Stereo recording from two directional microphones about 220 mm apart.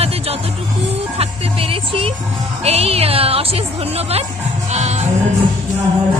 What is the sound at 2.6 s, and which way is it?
A woman's voice, 30° right (ahead or behind).